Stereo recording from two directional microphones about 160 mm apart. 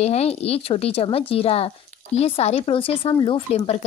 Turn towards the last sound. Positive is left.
turn(degrees=40)  # may be behind; listen again after turning